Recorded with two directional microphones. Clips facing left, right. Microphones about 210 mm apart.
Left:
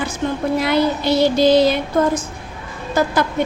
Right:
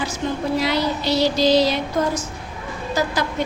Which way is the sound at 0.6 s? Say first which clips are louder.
Left 4 dB; 55° left (ahead or behind).